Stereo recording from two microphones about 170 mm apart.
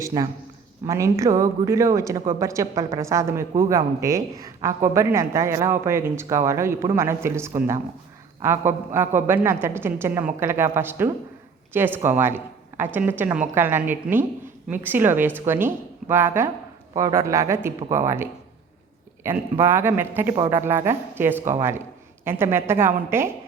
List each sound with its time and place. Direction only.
0.0 s a man's voice: 20° right (ahead or behind)